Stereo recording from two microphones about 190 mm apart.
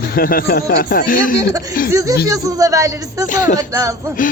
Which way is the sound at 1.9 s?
15° right (ahead or behind).